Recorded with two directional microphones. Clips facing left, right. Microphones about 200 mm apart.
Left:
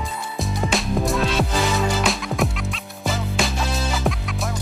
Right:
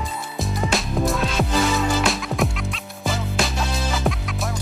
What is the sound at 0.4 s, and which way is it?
Music, centre (ahead or behind).